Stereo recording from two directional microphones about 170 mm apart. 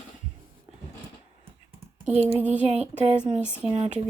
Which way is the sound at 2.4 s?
10° right (ahead or behind).